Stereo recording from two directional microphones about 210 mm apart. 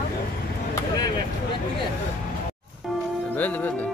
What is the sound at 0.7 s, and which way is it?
Vehicle, 20° left (ahead or behind).